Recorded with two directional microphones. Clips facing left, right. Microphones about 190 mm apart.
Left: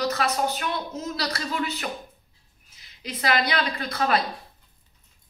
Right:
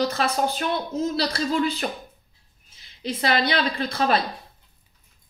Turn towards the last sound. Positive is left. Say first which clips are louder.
# right 2 dB
turn(degrees=-30)  # may be behind; listen again after turning